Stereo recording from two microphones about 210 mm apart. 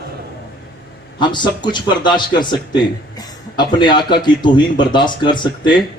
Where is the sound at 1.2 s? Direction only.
20° left (ahead or behind).